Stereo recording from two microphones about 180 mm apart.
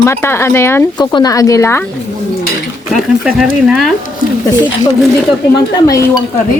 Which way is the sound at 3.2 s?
5° right (ahead or behind).